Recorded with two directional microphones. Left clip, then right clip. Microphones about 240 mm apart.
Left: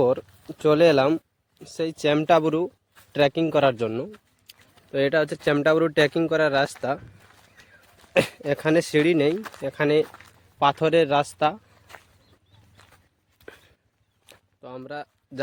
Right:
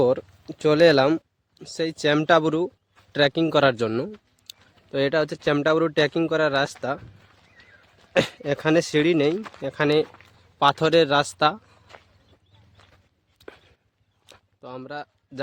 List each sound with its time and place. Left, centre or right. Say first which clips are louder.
0.0 s speech: right 1 dB; centre
4.4 s speech: right 4 dB; centre
8.1 s speech: even; centre
9.3 s speech: even; left
9.6 s speech: even; centre
11.9 s a sound: left 2 dB; left
13.4 s a sound: right 1 dB; centre